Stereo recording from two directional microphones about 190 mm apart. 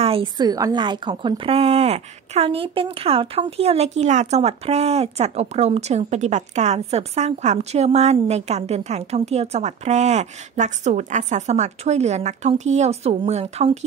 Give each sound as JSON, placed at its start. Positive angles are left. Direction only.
{"t": 0.0, "sound": "a woman's voice", "side_deg": -30}